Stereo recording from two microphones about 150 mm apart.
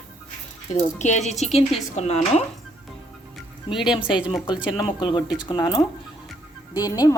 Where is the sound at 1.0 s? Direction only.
50° left (ahead or behind).